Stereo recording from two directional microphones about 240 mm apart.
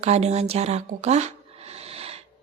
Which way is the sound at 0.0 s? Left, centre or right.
Right.